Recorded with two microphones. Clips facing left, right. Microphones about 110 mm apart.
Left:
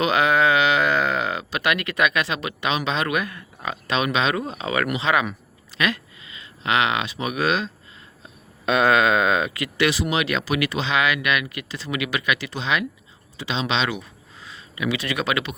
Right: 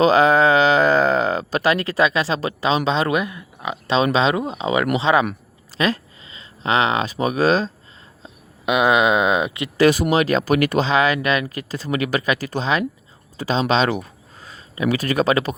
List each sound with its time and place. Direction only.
0.0 s speech: 35° right (ahead or behind)
8.2 s speech: 15° right (ahead or behind)
9.7 s speech: 40° right (ahead or behind)